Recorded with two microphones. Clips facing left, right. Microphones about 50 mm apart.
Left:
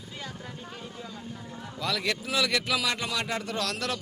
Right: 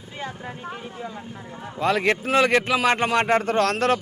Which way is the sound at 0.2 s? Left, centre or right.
Right.